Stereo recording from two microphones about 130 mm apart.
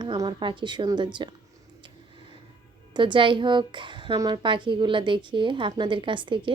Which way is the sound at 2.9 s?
35° right (ahead or behind).